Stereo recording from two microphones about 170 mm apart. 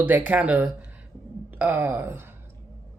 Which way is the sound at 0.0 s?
10° right (ahead or behind).